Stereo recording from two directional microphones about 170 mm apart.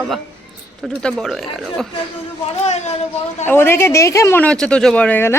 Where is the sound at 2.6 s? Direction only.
40° left (ahead or behind).